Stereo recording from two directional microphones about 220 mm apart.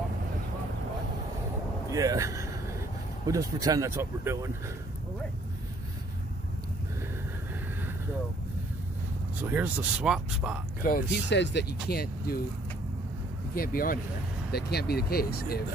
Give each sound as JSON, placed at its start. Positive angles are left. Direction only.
{"t": 1.9, "sound": "speech", "side_deg": -15}
{"t": 9.4, "sound": "speech", "side_deg": -5}
{"t": 10.8, "sound": "speech", "side_deg": 45}
{"t": 13.6, "sound": "speech", "side_deg": 40}